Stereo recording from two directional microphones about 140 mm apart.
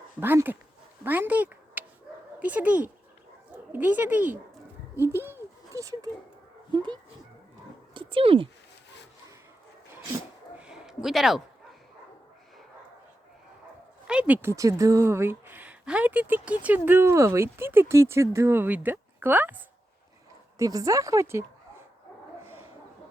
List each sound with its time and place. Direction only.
0.2 s a woman's voice: 15° right (ahead or behind)
4.9 s a sound: 15° right (ahead or behind)
6.7 s a child's voice: 35° right (ahead or behind)
10.6 s a sound: 5° right (ahead or behind)
14.1 s a woman's voice: 10° right (ahead or behind)
20.6 s a woman's voice: 25° right (ahead or behind)